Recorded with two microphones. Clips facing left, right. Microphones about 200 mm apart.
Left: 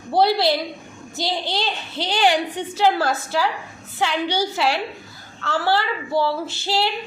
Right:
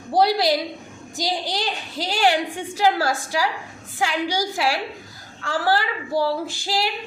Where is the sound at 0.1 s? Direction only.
15° right (ahead or behind).